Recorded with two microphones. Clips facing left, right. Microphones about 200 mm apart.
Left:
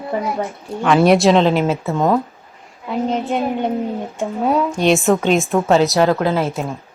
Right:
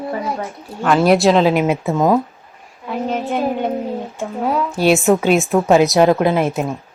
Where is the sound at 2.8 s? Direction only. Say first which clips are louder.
Left 2 dB; 20° left (ahead or behind).